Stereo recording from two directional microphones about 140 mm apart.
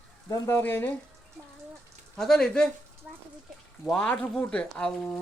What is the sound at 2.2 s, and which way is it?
Speech, 5° left (ahead or behind).